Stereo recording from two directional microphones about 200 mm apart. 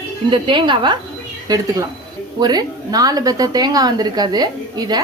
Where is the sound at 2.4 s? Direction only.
20° right (ahead or behind).